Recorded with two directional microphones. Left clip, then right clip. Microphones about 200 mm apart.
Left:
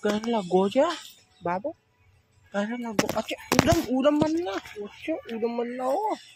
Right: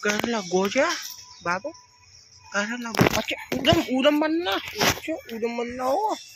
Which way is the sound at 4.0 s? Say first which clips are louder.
Right 2 dB; centre (ahead or behind).